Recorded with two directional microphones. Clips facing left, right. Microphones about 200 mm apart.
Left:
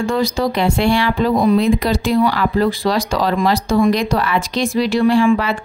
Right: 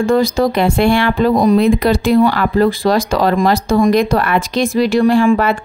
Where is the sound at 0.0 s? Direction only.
50° right (ahead or behind).